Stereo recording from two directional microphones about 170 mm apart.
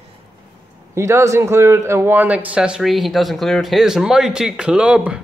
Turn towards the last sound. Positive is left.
turn(degrees=-5)  # may be behind; listen again after turning